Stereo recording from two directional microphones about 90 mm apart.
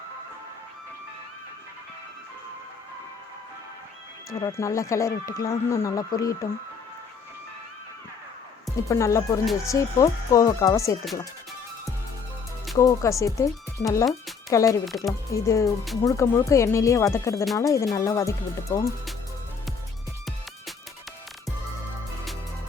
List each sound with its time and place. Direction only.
4.3 s speech: 40° left (ahead or behind)
8.9 s speech: 35° left (ahead or behind)
12.7 s speech: 40° left (ahead or behind)
14.8 s speech: centre (ahead or behind)
15.3 s speech: 35° left (ahead or behind)